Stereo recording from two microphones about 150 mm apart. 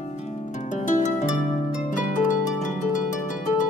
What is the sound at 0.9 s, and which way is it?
Harp, 55° left (ahead or behind).